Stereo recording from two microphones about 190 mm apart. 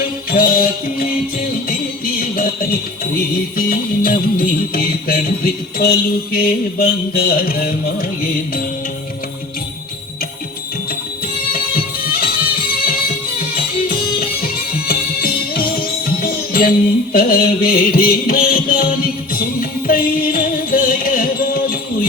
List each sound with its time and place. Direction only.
0.3 s music: 50° left (ahead or behind)
11.5 s music: 50° left (ahead or behind)